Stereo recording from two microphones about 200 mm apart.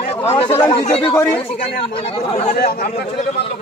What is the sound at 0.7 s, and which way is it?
Speech, 25° left (ahead or behind).